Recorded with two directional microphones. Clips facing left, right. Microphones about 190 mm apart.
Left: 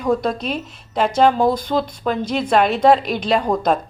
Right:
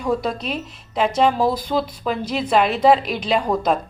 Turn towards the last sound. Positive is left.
turn(degrees=0)  # may be behind; listen again after turning